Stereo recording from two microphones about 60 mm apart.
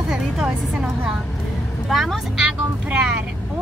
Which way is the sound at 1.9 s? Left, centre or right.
Centre.